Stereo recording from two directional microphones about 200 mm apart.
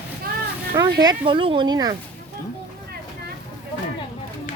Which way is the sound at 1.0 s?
20° right (ahead or behind).